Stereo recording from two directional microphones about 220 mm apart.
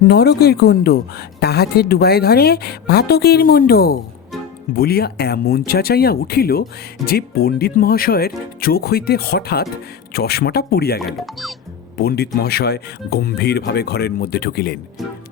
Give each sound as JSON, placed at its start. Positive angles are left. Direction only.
{"t": 0.1, "sound": "speech", "side_deg": 45}
{"t": 11.0, "sound": "speech", "side_deg": 0}
{"t": 11.9, "sound": "speech", "side_deg": 45}